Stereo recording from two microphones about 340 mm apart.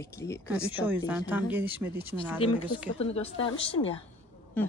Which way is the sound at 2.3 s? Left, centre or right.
Centre.